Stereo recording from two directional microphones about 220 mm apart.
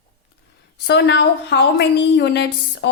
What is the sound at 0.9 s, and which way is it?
A woman's voice, 50° left (ahead or behind).